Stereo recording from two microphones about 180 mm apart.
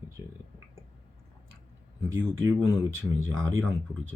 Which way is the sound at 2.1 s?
90° right.